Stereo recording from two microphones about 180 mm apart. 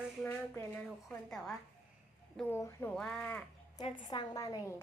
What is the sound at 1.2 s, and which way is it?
A woman's voice, centre (ahead or behind).